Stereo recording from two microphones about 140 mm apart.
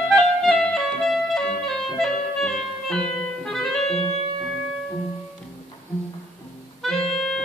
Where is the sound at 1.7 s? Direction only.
Centre (ahead or behind).